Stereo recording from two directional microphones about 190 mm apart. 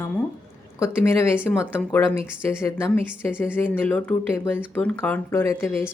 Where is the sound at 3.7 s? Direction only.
10° left (ahead or behind).